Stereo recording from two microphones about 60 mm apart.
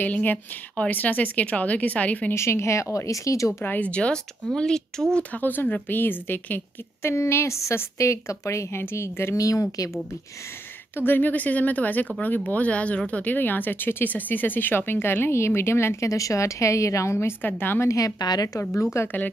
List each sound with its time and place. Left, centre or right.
0.0 s speech: left
2.3 s a woman's voice: left
3.6 s speech: left
3.9 s speech: centre
5.3 s speech: left
7.0 s a woman's voice: left
9.4 s speech: left
11.0 s speech: left
16.1 s a woman's voice: left
17.4 s speech: left
17.8 s a woman's voice: left
18.9 s a woman's voice: left